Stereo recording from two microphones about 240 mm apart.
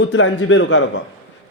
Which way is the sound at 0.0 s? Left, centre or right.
Left.